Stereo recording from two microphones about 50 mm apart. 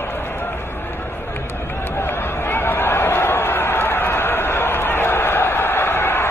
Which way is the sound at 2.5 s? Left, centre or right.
Left.